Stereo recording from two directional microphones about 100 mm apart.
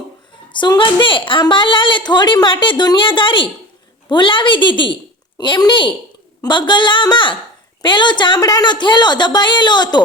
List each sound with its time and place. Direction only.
0.5 s a woman's voice: 50° left (ahead or behind)
8.4 s a woman's voice: 40° left (ahead or behind)